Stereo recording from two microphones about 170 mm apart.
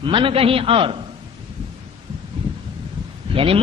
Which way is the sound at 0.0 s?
30° right (ahead or behind).